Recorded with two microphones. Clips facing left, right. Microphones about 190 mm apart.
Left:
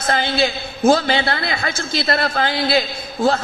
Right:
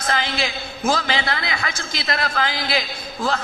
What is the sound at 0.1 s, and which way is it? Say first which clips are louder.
A man's voice: left 5 dB; 35° left (ahead or behind).